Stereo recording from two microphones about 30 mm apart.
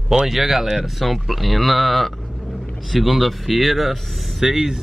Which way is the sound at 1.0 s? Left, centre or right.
Centre.